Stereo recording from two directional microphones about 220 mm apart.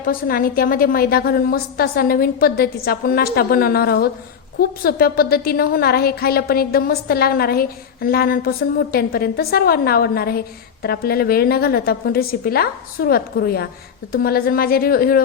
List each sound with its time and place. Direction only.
0.0 s a woman's voice: 40° left (ahead or behind)